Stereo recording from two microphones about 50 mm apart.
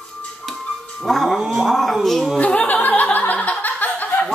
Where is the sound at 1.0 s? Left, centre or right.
Centre.